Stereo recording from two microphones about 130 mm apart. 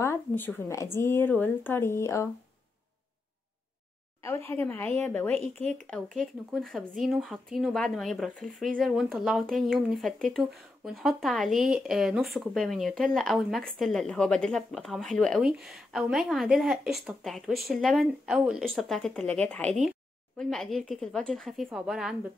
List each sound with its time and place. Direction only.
0.0 s a sound: 15° left (ahead or behind)
0.9 s speech: 20° left (ahead or behind)
4.2 s speech: 20° left (ahead or behind)
5.3 s speech: 55° right (ahead or behind)
5.7 s speech: 5° left (ahead or behind)